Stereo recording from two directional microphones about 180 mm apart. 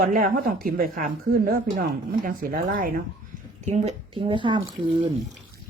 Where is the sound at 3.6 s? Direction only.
40° right (ahead or behind).